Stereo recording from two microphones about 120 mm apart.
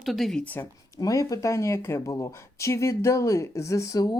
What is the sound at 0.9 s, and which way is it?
A woman's voice, 25° left (ahead or behind).